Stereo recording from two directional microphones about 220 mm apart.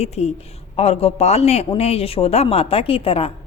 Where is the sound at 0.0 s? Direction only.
30° left (ahead or behind).